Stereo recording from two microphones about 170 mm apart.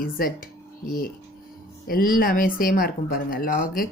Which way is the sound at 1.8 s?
60° left (ahead or behind).